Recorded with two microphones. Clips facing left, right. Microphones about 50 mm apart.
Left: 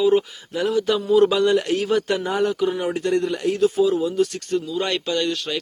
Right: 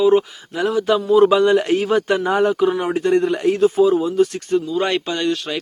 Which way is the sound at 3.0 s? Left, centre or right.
Right.